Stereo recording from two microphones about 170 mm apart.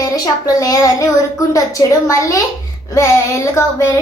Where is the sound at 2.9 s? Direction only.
15° left (ahead or behind).